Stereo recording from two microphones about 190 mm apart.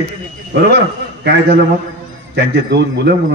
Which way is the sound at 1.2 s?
60° right (ahead or behind).